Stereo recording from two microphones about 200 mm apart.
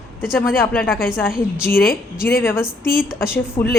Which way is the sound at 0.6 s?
10° left (ahead or behind).